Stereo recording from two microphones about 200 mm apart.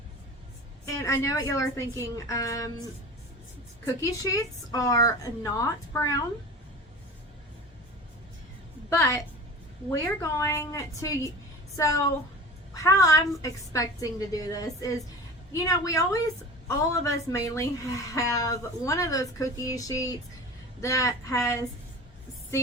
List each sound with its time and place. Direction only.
1.0 s a woman's voice: 15° left (ahead or behind)
3.8 s a woman's voice: 15° left (ahead or behind)
9.0 s a woman's voice: 15° left (ahead or behind)
12.7 s a woman's voice: 15° left (ahead or behind)